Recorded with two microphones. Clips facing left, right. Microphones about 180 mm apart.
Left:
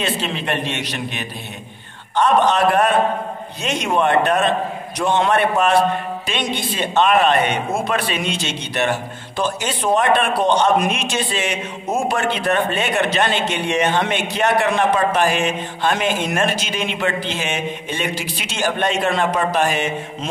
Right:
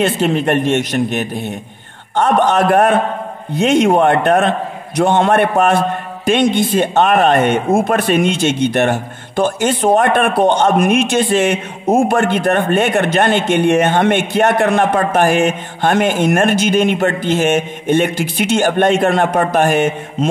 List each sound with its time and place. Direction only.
0.0 s a man's voice: 50° right (ahead or behind)